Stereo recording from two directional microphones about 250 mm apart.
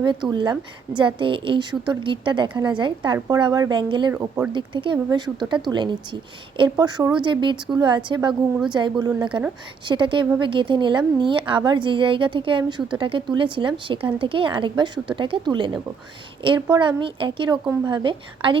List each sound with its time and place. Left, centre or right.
0.0 s a woman's voice: centre
4.1 s speech: centre
4.5 s a woman's voice: centre